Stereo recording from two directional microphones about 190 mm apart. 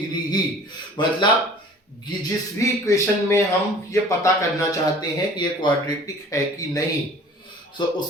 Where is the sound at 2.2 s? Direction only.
15° left (ahead or behind).